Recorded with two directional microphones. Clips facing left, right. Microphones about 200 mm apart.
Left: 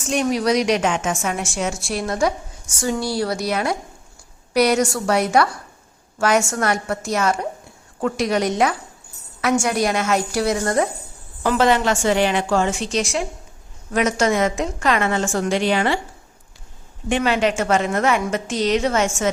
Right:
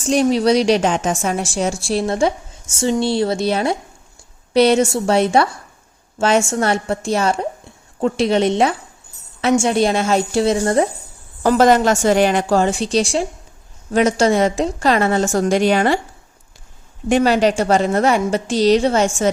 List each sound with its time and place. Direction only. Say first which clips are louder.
0.0 s a woman's voice: right 5 dB; 30° right (ahead or behind)
11.4 s a woman's voice: right 5 dB; 40° right (ahead or behind)
17.1 s a woman's voice: right 5 dB; 40° right (ahead or behind)